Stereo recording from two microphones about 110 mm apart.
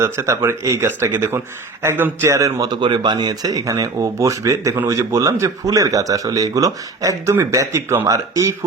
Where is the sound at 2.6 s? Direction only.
40° right (ahead or behind).